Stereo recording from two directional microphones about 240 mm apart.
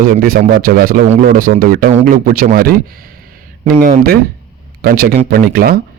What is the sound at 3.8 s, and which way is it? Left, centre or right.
Speech, right.